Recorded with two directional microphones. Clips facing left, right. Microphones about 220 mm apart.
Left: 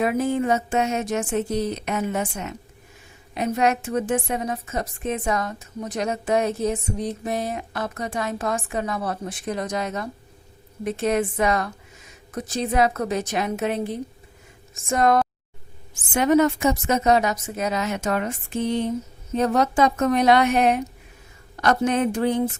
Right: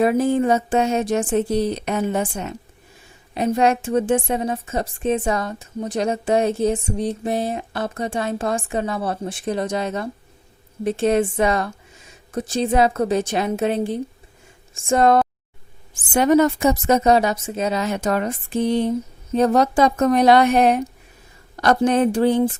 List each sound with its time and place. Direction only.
0.0 s a woman's voice: 35° right (ahead or behind)